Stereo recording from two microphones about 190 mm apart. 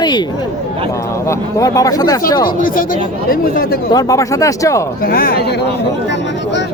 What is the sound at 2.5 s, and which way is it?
Speech, 45° left (ahead or behind).